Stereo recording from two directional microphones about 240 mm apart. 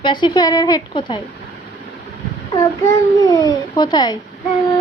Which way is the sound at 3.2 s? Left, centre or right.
Centre.